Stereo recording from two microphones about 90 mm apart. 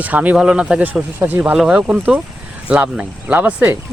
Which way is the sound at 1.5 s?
10° right (ahead or behind).